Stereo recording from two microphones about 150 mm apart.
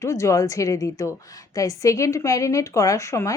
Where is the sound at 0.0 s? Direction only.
20° left (ahead or behind).